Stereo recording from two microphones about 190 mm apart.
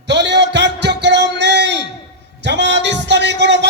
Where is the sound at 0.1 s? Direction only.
65° right (ahead or behind).